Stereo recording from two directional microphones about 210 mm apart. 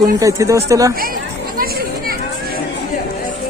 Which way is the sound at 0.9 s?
45° right (ahead or behind).